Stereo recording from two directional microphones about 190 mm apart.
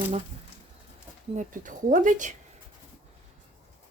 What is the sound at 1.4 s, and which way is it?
Speech, 40° right (ahead or behind).